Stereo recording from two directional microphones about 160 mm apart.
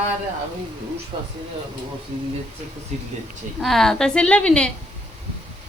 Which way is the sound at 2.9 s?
45° right (ahead or behind).